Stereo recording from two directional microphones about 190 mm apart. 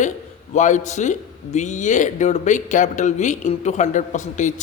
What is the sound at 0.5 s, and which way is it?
A man's voice, 40° left (ahead or behind).